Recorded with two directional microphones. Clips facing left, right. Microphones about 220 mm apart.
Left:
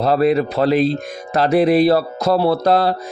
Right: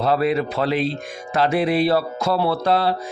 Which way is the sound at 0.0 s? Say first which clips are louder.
Left 4 dB; 40° left (ahead or behind).